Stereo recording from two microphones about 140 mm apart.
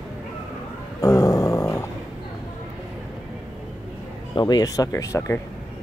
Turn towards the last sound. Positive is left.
turn(degrees=20)  # may be behind; listen again after turning